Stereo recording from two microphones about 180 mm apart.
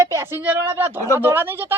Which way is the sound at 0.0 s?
15° right (ahead or behind).